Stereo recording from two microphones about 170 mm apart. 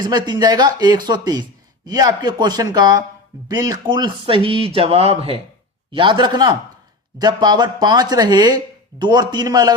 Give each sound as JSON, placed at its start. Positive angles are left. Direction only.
{"t": 0.0, "sound": "speech", "side_deg": -25}